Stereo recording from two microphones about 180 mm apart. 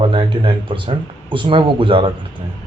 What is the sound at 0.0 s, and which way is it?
Speech, 30° right (ahead or behind).